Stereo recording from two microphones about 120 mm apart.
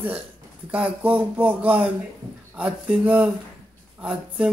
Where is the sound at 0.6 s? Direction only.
10° right (ahead or behind).